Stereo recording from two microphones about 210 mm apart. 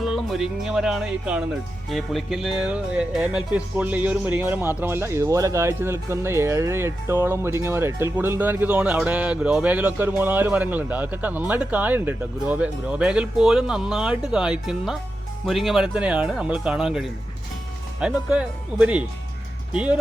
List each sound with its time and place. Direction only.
0.0 s speech: centre (ahead or behind)